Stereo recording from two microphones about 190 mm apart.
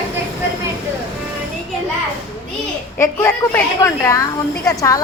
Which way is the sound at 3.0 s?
15° left (ahead or behind).